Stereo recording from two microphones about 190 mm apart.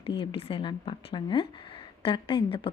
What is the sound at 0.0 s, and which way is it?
A woman's voice, 25° left (ahead or behind).